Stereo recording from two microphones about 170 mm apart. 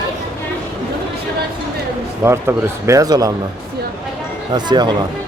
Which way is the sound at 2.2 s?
15° right (ahead or behind).